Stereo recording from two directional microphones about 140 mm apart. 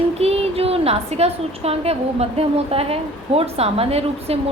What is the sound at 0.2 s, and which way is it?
A woman's voice, 45° right (ahead or behind).